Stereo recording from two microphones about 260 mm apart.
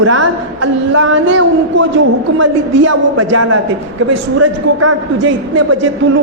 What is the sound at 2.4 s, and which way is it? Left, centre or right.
A man's voice, right.